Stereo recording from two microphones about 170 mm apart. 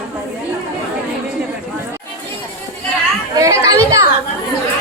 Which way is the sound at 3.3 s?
20° right (ahead or behind).